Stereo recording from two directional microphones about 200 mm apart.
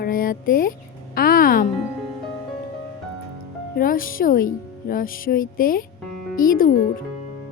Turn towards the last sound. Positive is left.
turn(degrees=45)  # may be behind; listen again after turning